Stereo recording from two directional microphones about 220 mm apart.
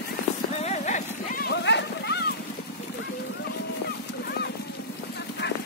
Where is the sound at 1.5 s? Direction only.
50° left (ahead or behind).